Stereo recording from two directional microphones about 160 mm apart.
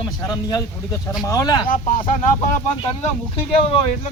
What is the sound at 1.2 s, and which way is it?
Speech, 25° left (ahead or behind).